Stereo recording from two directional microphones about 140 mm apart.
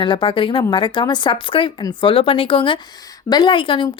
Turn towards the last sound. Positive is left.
turn(degrees=35)  # may be behind; listen again after turning